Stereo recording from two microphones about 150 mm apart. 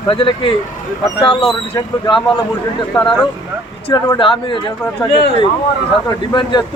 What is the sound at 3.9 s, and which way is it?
Speech, 30° left (ahead or behind).